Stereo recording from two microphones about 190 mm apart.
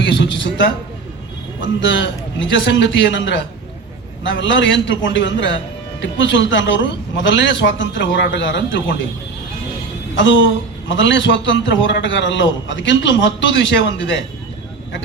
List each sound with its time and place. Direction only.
0.0 s a sound: 70° left (ahead or behind)
1.6 s a man's voice: 75° left (ahead or behind)
10.2 s a woman's voice: 80° left